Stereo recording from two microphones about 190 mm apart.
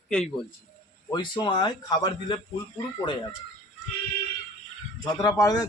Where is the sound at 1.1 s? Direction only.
25° left (ahead or behind).